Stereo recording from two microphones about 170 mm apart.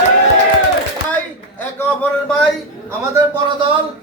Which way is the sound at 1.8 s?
5° left (ahead or behind).